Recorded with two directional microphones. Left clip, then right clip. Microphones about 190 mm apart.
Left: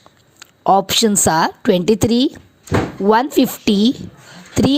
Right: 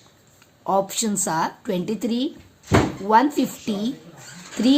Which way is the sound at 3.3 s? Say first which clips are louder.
Left 10 dB; 45° left (ahead or behind).